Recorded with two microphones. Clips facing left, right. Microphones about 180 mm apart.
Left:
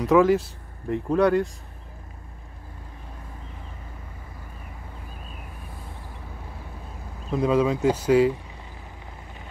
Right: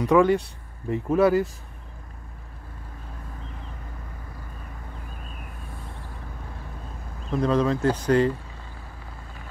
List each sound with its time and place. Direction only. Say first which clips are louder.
0.0 s speech: left 1 dB; centre (ahead or behind)
7.2 s speech: left 1 dB; 10° left (ahead or behind)